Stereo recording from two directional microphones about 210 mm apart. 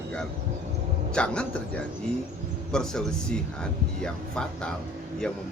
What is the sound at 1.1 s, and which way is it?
Speech, 5° left (ahead or behind).